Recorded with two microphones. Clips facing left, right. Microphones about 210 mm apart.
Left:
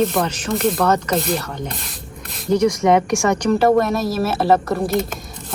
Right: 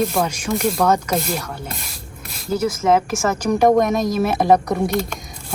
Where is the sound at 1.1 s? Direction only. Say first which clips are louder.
Left 2 dB; centre (ahead or behind); by 4.6 s 15° right (ahead or behind).